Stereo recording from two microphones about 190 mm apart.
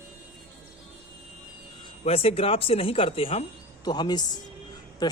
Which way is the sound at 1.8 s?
30° left (ahead or behind).